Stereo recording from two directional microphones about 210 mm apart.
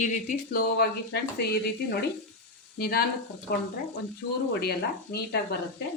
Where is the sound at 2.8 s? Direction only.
45° left (ahead or behind).